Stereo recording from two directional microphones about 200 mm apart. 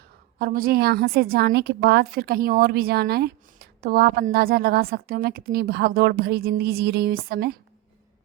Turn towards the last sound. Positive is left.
turn(degrees=-50)  # may be behind; listen again after turning